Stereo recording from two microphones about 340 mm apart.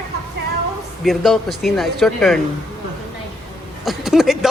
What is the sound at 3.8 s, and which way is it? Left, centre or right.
Speech, centre.